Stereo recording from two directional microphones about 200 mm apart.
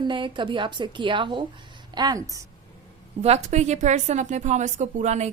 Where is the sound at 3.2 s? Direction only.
35° right (ahead or behind).